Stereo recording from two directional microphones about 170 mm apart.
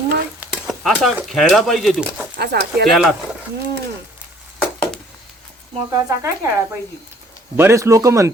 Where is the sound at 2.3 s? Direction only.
75° right (ahead or behind).